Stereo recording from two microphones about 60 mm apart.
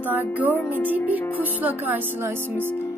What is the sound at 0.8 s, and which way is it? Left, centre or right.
Speech, left.